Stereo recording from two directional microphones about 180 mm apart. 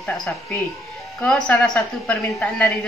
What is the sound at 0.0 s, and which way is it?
A woman's voice, 5° left (ahead or behind).